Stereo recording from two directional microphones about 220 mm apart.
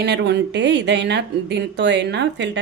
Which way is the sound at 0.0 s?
50° right (ahead or behind).